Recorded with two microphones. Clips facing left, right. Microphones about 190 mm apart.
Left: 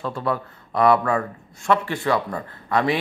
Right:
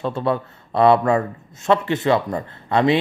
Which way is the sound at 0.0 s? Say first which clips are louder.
Right 4 dB; 25° right (ahead or behind).